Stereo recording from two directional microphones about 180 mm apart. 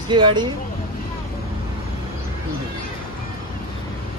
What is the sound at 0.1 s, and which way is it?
Speech, 25° right (ahead or behind).